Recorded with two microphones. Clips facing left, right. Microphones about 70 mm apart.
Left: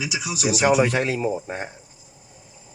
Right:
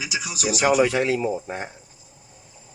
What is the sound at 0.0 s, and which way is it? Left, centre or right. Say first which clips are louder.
Speech: left 2 dB; right.